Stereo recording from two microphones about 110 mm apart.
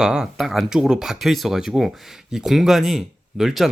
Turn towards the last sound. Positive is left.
turn(degrees=0)  # may be behind; listen again after turning